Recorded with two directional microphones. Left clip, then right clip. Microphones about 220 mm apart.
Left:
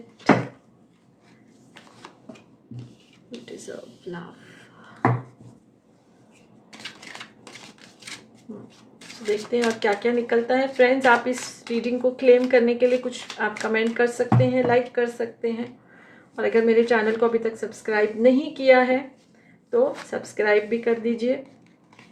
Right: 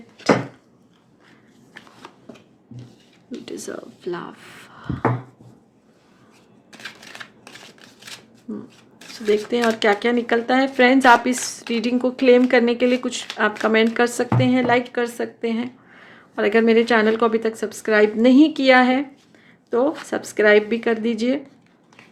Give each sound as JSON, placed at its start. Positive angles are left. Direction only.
{"t": 3.7, "sound": "speech", "side_deg": -50}
{"t": 9.8, "sound": "speech", "side_deg": -50}